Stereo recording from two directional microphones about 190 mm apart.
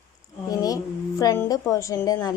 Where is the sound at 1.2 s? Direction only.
15° left (ahead or behind).